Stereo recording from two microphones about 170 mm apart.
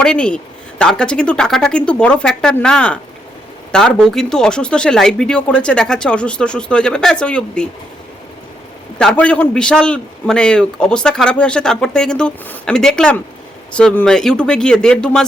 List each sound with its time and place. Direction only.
0.0 s a man's voice: 5° left (ahead or behind)
9.0 s a man's voice: 5° left (ahead or behind)